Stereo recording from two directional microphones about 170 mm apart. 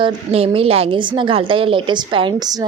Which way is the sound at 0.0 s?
35° right (ahead or behind).